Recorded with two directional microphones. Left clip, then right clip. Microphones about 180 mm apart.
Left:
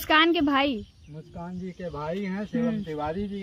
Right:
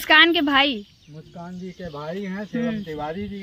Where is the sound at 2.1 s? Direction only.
5° right (ahead or behind).